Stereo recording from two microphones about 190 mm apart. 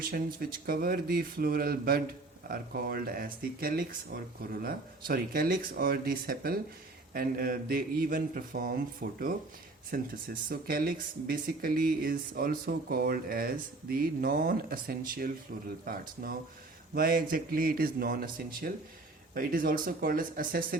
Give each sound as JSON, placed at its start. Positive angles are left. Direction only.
{"t": 0.0, "sound": "speech", "side_deg": -50}